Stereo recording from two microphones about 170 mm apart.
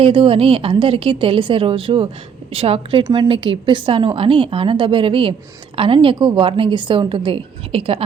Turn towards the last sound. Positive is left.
turn(degrees=-35)  # may be behind; listen again after turning